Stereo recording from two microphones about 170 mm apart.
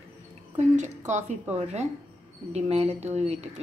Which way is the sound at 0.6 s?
45° right (ahead or behind).